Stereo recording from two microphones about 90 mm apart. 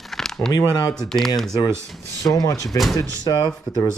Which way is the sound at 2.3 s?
40° left (ahead or behind).